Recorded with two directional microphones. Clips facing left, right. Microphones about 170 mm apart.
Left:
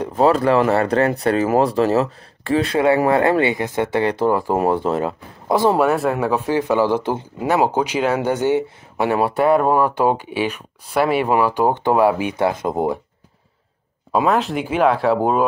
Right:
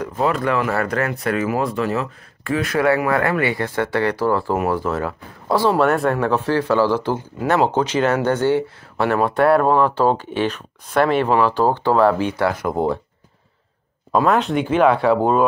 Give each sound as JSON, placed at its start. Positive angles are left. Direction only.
{"t": 0.0, "sound": "speech", "side_deg": 30}
{"t": 5.9, "sound": "speech", "side_deg": 5}
{"t": 7.4, "sound": "speech", "side_deg": 10}
{"t": 14.1, "sound": "speech", "side_deg": 5}